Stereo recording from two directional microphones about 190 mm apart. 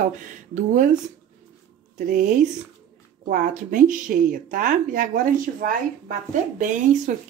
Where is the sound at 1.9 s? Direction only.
45° right (ahead or behind).